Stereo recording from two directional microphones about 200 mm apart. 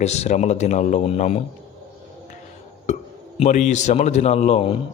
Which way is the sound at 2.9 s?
35° left (ahead or behind).